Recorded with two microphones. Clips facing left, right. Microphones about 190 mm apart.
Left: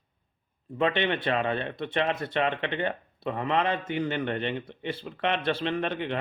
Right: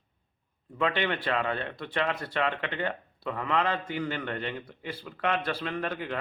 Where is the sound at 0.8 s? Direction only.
25° left (ahead or behind).